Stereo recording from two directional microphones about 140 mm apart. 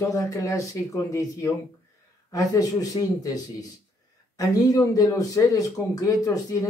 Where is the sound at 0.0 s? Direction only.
20° left (ahead or behind).